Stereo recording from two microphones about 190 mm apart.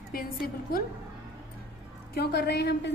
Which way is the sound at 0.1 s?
50° left (ahead or behind).